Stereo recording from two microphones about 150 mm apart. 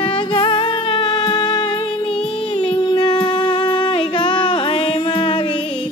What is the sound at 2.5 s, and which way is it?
Singing, 40° left (ahead or behind).